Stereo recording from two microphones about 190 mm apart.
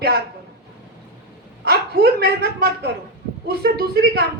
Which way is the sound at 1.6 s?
55° right (ahead or behind).